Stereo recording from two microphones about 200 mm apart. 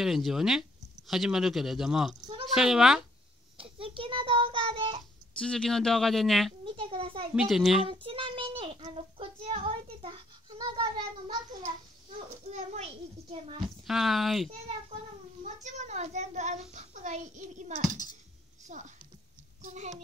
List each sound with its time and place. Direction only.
0.0 s speech: centre (ahead or behind)
3.5 s child singing: 25° right (ahead or behind)
5.4 s speech: 5° left (ahead or behind)
6.6 s a sound: 25° right (ahead or behind)
7.3 s speech: centre (ahead or behind)
7.8 s child singing: 25° right (ahead or behind)
12.4 s a child's voice: 35° right (ahead or behind)
13.8 s speech: centre (ahead or behind)
15.4 s a child's voice: 35° right (ahead or behind)